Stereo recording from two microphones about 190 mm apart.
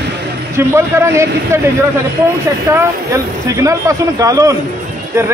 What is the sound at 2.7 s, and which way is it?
Speech, 15° right (ahead or behind).